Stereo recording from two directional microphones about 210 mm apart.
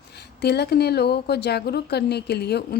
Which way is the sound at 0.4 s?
50° left (ahead or behind).